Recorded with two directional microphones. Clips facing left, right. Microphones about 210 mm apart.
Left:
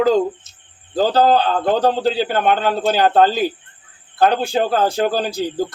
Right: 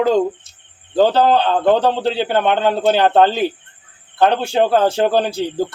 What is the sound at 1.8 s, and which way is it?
Speech, 25° right (ahead or behind).